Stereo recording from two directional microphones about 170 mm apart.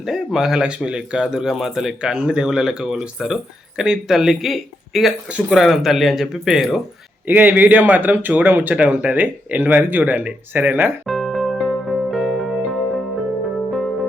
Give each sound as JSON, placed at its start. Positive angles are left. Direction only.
{"t": 0.0, "sound": "speech", "side_deg": 0}
{"t": 11.0, "sound": "music", "side_deg": 0}